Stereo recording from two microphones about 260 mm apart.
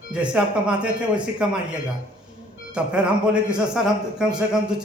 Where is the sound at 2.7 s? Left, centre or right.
Centre.